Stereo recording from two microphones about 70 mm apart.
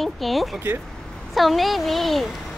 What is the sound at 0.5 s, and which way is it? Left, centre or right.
Speech, right.